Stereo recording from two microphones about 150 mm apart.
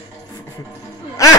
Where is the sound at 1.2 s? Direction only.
20° left (ahead or behind).